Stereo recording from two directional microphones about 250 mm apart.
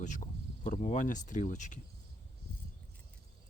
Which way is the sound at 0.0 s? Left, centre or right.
Left.